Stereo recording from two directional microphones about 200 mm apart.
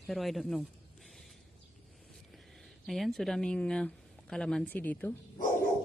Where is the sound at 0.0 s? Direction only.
Centre (ahead or behind).